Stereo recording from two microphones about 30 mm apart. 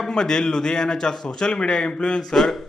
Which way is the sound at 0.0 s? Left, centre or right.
Left.